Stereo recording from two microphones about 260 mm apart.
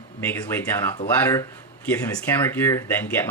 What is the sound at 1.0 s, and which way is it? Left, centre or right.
Speech, centre.